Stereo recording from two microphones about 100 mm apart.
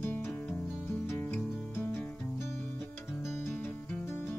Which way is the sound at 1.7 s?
25° left (ahead or behind).